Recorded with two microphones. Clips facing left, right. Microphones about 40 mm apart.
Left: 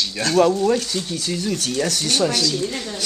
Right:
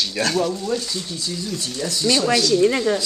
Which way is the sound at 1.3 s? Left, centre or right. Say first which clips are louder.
Left 6 dB; left.